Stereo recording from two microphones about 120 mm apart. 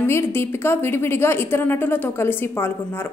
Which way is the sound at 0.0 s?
20° left (ahead or behind).